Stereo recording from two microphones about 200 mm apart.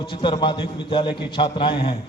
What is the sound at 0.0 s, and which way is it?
Speech, 25° left (ahead or behind).